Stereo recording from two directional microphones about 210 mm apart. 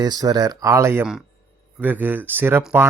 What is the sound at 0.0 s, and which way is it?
Speech, 20° right (ahead or behind).